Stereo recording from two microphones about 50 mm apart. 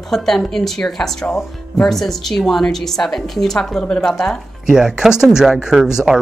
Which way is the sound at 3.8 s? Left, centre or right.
Centre.